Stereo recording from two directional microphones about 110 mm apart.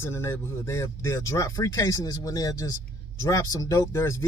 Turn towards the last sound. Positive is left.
turn(degrees=25)  # may be behind; listen again after turning